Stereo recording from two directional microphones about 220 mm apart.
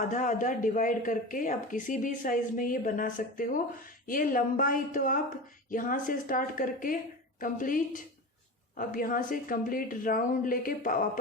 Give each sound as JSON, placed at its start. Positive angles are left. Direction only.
{"t": 0.0, "sound": "speech", "side_deg": 35}